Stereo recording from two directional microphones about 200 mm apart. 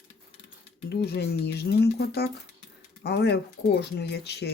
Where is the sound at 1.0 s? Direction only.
55° left (ahead or behind).